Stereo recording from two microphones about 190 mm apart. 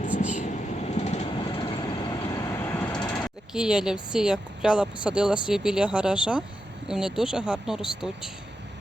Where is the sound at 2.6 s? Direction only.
10° left (ahead or behind).